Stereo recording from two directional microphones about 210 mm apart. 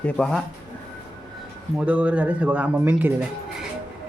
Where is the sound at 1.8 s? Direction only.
5° right (ahead or behind).